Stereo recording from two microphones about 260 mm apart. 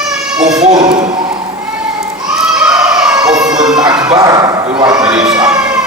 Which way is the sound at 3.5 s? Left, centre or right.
Centre.